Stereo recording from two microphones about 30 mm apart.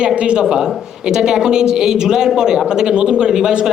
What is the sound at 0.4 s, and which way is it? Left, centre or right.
A man's voice, right.